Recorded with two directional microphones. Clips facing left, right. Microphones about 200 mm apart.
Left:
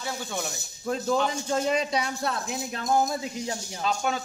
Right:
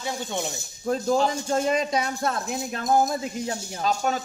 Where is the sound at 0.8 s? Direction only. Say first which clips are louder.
Right 3 dB; 40° right (ahead or behind).